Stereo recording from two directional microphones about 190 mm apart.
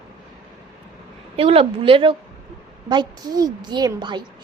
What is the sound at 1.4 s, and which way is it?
A woman's voice, 30° right (ahead or behind).